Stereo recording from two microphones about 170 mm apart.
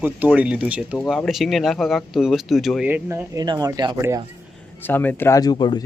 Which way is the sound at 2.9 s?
15° right (ahead or behind).